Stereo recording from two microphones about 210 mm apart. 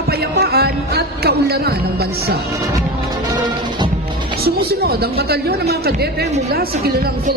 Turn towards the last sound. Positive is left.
turn(degrees=-50)  # may be behind; listen again after turning